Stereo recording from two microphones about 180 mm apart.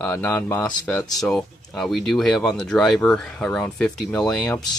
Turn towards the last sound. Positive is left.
turn(degrees=5)  # may be behind; listen again after turning